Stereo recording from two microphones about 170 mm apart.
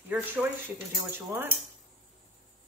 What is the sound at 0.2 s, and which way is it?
Chopping, 10° right (ahead or behind).